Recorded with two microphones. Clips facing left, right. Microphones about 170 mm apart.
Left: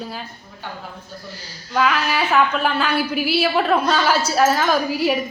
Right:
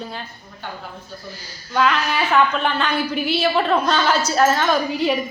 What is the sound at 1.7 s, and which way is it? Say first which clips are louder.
A woman's voice: even; 5° left (ahead or behind).